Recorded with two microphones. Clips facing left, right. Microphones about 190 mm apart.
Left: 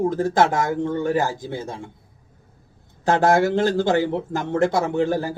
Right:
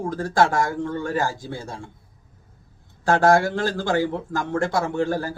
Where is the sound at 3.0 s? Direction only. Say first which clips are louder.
Even; 20° left (ahead or behind).